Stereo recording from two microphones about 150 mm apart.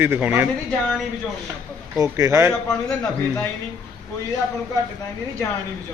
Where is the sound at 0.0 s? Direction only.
10° right (ahead or behind).